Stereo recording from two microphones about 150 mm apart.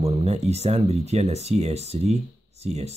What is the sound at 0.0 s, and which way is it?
Speech, 45° right (ahead or behind).